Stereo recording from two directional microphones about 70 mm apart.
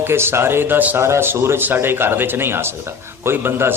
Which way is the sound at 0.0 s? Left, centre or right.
Right.